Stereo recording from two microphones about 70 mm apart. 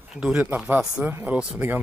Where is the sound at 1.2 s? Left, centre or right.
Right.